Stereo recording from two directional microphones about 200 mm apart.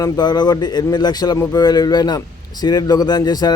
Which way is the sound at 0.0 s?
20° left (ahead or behind).